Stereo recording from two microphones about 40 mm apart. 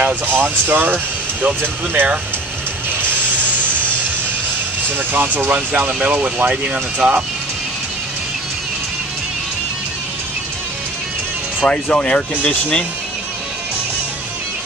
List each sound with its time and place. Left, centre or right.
0.0 s speech: right
4.9 s speech: right
5.9 s speech: right
11.9 s speech: left